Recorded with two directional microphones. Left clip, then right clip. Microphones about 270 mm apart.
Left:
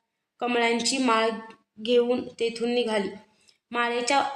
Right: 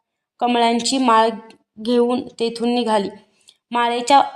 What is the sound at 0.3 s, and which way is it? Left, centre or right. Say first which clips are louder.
A woman's voice: right 7 dB; right.